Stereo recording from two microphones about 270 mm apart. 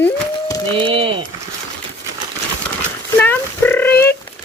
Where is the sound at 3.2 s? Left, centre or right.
Centre.